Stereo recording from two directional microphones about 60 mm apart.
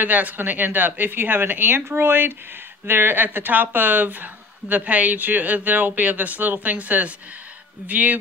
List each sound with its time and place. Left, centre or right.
0.0 s speech: right